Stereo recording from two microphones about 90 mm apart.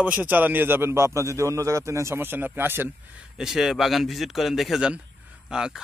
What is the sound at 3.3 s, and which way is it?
A man's voice, 5° right (ahead or behind).